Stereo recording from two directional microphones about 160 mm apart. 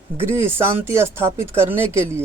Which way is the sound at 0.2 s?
15° right (ahead or behind).